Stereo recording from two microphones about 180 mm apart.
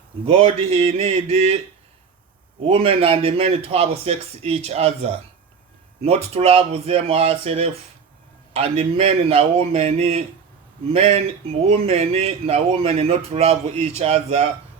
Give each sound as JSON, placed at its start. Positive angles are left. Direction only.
{"t": 0.3, "sound": "speech", "side_deg": -35}
{"t": 2.6, "sound": "speech", "side_deg": -30}